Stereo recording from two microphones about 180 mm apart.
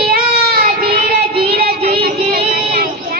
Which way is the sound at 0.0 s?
55° right (ahead or behind).